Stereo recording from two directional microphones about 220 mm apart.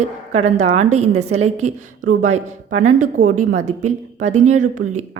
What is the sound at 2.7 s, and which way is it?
Speech, 70° right (ahead or behind).